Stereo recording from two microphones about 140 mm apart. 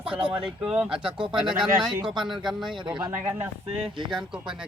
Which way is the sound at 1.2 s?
35° right (ahead or behind).